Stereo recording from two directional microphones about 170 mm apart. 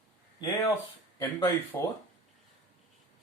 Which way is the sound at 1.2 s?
20° left (ahead or behind).